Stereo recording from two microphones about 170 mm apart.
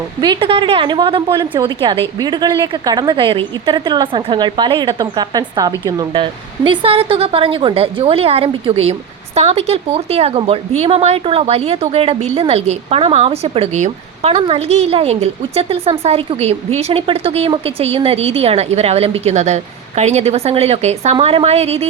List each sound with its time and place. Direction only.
0.2 s a woman's voice: 30° right (ahead or behind)
6.7 s a woman's voice: 35° right (ahead or behind)